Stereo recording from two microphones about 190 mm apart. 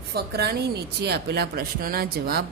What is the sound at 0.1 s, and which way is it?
Speech, 55° right (ahead or behind).